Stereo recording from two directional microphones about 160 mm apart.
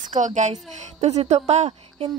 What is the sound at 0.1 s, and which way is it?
A woman's voice, 50° right (ahead or behind).